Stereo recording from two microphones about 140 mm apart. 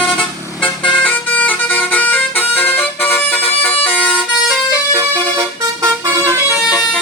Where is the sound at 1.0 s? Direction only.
10° left (ahead or behind).